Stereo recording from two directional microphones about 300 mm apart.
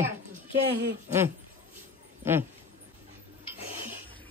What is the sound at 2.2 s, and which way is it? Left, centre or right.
Speech, centre.